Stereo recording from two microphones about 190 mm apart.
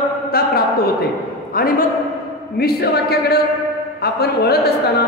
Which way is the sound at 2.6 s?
55° left (ahead or behind).